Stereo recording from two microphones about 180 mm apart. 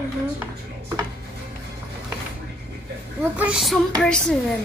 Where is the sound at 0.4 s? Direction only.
15° right (ahead or behind).